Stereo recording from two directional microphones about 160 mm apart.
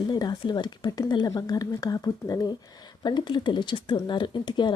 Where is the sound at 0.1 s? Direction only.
25° left (ahead or behind).